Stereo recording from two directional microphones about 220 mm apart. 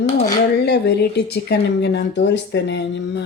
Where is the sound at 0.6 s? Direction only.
50° left (ahead or behind).